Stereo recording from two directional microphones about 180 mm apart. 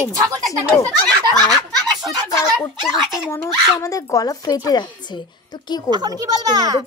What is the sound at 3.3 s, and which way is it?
Speech, 15° left (ahead or behind).